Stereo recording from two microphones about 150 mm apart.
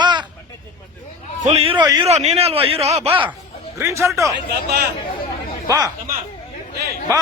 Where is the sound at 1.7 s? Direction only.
25° right (ahead or behind).